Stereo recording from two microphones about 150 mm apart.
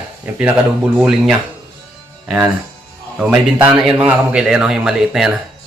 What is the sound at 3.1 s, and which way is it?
A man's voice, 10° right (ahead or behind).